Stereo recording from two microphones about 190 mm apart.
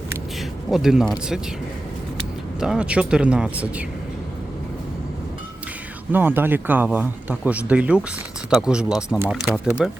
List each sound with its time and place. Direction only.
0.7 s speech: centre (ahead or behind)
2.6 s speech: 5° right (ahead or behind)
6.1 s speech: 10° right (ahead or behind)